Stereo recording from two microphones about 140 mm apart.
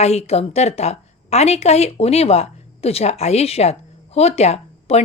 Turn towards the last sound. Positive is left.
turn(degrees=50)  # may be behind; listen again after turning